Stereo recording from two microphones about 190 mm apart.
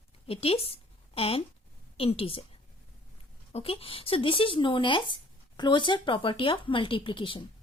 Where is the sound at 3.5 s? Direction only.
30° left (ahead or behind).